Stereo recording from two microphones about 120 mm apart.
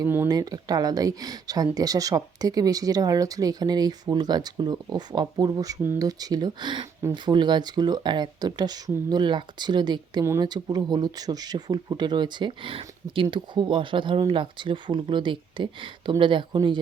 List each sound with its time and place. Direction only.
0.0 s speech: 15° right (ahead or behind)
0.3 s speech: 30° right (ahead or behind)